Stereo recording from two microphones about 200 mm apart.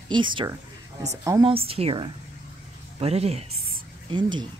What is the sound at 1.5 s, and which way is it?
A woman's voice, 30° right (ahead or behind).